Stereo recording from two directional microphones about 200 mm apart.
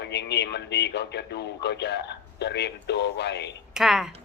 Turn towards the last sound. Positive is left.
turn(degrees=0)  # may be behind; listen again after turning